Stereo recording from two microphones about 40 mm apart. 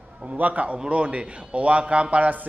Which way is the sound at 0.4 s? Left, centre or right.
Right.